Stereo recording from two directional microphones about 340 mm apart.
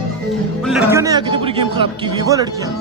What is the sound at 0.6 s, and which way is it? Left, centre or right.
A man's voice, centre.